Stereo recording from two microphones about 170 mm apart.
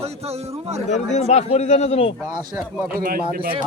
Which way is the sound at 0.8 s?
45° left (ahead or behind).